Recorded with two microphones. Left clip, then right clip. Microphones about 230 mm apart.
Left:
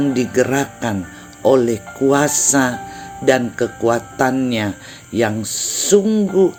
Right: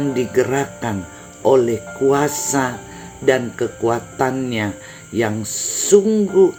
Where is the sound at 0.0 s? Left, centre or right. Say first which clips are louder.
Left 1 dB; left.